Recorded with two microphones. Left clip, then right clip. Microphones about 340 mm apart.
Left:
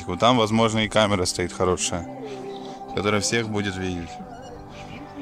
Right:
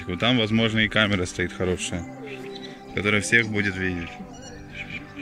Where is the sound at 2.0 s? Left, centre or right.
Left.